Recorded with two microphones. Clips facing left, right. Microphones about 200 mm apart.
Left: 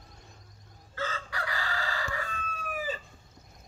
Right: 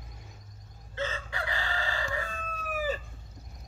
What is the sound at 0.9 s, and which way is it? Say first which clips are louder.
Chicken: right 1 dB; 25° right (ahead or behind).